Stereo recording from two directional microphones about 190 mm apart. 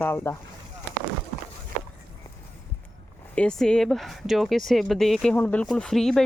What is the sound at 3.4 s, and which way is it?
Speech, 5° left (ahead or behind).